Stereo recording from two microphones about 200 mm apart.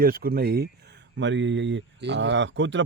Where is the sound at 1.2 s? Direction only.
65° right (ahead or behind).